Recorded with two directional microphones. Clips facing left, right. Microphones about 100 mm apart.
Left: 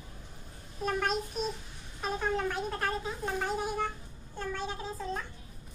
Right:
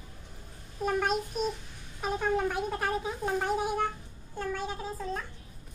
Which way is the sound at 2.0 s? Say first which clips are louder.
Right 3 dB; 10° right (ahead or behind).